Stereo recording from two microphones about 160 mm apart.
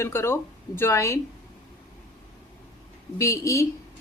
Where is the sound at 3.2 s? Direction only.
20° left (ahead or behind).